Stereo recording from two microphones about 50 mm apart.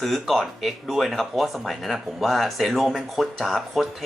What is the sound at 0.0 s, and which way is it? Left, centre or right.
Speech, centre.